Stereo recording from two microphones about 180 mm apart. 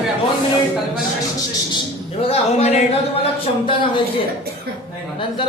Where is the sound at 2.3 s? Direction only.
35° left (ahead or behind).